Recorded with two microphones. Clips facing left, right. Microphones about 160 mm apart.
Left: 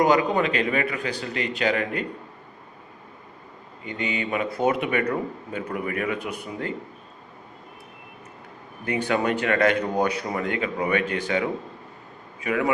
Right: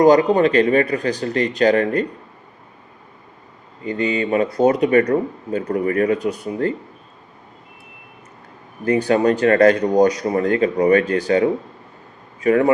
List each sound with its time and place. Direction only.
0.0 s speech: 40° right (ahead or behind)
3.8 s speech: 40° right (ahead or behind)
8.8 s speech: 40° right (ahead or behind)
12.4 s speech: 40° right (ahead or behind)